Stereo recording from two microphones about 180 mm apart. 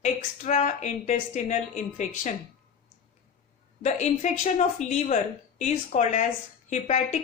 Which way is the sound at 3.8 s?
40° left (ahead or behind).